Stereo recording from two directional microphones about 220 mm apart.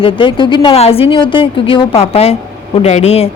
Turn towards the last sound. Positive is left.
turn(degrees=30)  # may be behind; listen again after turning